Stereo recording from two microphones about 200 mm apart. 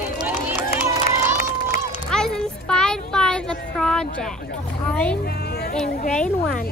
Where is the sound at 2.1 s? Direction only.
5° left (ahead or behind).